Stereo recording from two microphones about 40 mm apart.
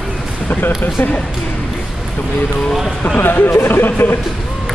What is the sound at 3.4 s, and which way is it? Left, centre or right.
Speech, left.